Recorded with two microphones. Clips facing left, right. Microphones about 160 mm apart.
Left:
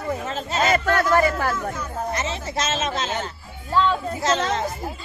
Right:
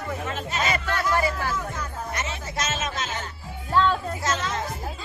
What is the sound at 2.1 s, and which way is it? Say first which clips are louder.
Speech: left 5 dB; 30° left (ahead or behind).